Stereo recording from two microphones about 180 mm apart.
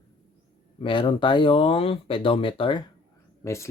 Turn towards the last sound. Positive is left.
turn(degrees=15)  # may be behind; listen again after turning